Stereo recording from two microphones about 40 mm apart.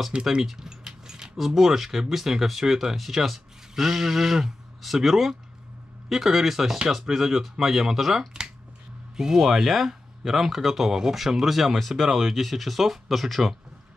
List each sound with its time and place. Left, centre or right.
0.1 s speech: right
0.4 s keys jangling: centre
1.4 s speech: centre
9.4 s speech: centre